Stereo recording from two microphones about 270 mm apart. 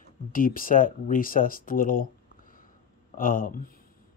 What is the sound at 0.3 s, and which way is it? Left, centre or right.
Speech, left.